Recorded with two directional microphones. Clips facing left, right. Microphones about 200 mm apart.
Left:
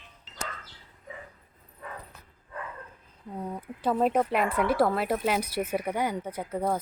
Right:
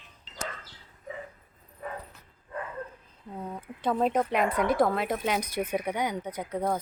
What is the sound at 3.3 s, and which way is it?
Speech, 15° left (ahead or behind).